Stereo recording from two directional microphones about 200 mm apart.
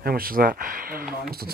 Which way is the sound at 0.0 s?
50° right (ahead or behind).